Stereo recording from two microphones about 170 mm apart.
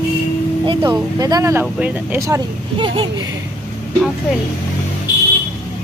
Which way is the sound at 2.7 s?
30° right (ahead or behind).